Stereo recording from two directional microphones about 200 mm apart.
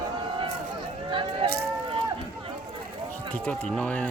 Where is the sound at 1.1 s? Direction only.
25° right (ahead or behind).